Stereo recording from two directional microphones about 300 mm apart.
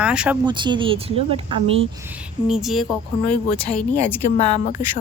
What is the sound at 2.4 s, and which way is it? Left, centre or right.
A woman's voice, centre.